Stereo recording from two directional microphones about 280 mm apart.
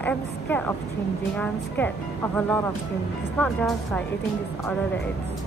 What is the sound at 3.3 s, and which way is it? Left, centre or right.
Speech, centre.